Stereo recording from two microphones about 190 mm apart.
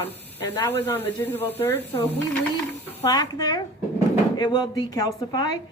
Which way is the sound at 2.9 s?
20° left (ahead or behind).